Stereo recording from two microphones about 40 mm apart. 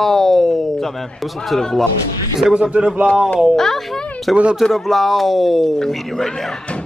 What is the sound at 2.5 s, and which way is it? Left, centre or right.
Speech, right.